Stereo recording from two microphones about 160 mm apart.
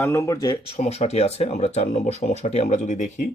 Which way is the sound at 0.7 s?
40° left (ahead or behind).